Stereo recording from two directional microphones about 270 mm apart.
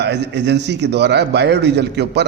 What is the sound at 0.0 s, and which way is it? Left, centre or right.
A man's voice, right.